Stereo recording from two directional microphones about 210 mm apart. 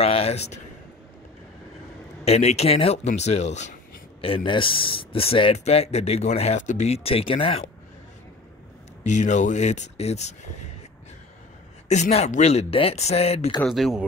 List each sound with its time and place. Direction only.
0.0 s a sound: 30° left (ahead or behind)
2.2 s speech: 30° left (ahead or behind)
9.0 s speech: 35° left (ahead or behind)
11.9 s speech: 30° left (ahead or behind)
13.6 s speech: centre (ahead or behind)